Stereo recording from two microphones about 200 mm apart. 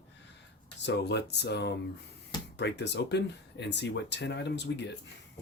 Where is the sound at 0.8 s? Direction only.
60° left (ahead or behind).